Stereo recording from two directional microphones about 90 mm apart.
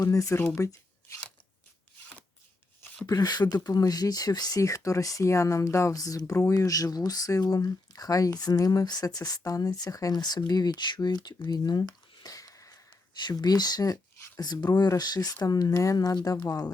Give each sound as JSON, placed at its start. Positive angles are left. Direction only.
{"t": 0.0, "sound": "speech", "side_deg": 40}
{"t": 3.1, "sound": "speech", "side_deg": 50}
{"t": 11.4, "sound": "a sound", "side_deg": 50}
{"t": 13.2, "sound": "speech", "side_deg": 45}